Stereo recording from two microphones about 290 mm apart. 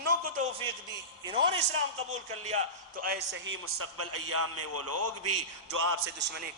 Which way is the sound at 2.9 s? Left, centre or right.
Right.